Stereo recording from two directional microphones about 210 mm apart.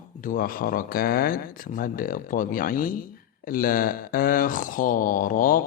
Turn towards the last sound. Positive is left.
turn(degrees=40)  # may be behind; listen again after turning